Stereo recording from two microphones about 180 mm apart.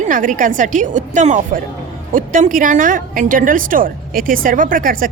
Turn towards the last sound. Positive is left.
turn(degrees=-50)  # may be behind; listen again after turning